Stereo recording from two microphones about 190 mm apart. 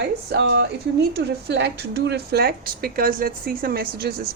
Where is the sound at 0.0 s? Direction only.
60° right (ahead or behind).